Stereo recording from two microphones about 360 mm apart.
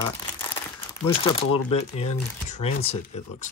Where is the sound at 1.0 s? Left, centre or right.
Centre.